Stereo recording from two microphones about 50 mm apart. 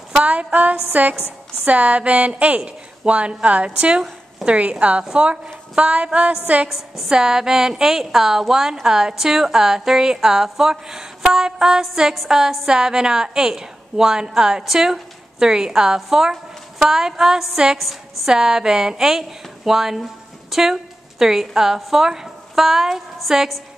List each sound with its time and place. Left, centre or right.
0.1 s a sound: right
1.0 s a woman's voice: right
7.1 s a woman's voice: centre